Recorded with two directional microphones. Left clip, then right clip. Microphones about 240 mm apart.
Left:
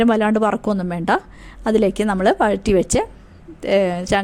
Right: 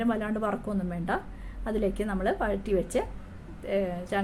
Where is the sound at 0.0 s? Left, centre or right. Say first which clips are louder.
Left 13 dB; left.